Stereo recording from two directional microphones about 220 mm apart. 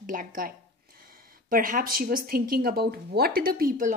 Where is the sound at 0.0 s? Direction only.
35° right (ahead or behind).